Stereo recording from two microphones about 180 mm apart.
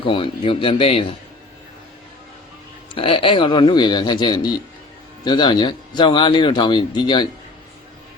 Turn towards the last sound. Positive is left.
turn(degrees=25)  # may be behind; listen again after turning